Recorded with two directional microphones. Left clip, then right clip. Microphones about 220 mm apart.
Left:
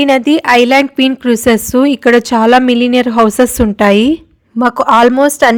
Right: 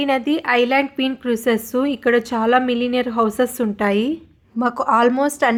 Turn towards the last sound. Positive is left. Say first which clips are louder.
# left 9 dB
turn(degrees=35)  # may be behind; listen again after turning